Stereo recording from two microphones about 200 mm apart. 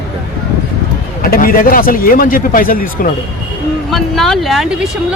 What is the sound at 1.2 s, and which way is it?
Speech, 45° left (ahead or behind).